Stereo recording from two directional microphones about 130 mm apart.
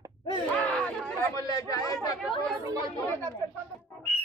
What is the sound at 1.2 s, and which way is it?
Speech, 25° left (ahead or behind).